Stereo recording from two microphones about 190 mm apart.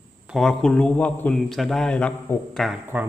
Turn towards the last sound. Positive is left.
turn(degrees=-5)  # may be behind; listen again after turning